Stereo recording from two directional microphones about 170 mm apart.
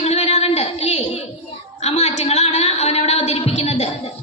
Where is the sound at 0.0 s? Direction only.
40° left (ahead or behind).